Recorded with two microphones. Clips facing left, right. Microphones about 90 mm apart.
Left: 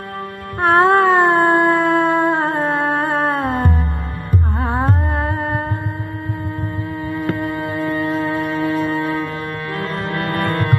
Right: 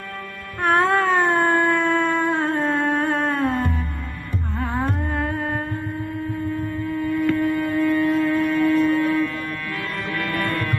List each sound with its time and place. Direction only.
0.6 s a sound: 45° left (ahead or behind)
1.5 s howl: 45° left (ahead or behind)
2.8 s music: 45° left (ahead or behind)
4.6 s carnatic music: 40° left (ahead or behind)
6.9 s music: 45° left (ahead or behind)
8.4 s music: 40° left (ahead or behind)